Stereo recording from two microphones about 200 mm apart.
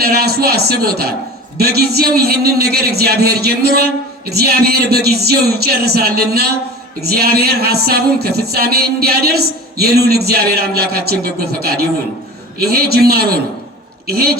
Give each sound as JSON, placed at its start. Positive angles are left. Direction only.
{"t": 0.0, "sound": "a man's voice", "side_deg": -50}